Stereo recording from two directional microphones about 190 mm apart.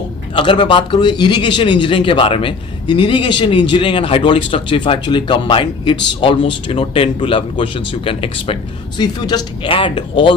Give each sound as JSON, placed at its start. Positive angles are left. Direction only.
{"t": 0.3, "sound": "speech", "side_deg": 25}